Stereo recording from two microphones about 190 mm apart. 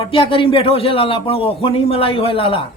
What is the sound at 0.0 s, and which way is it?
A man's voice, 30° left (ahead or behind).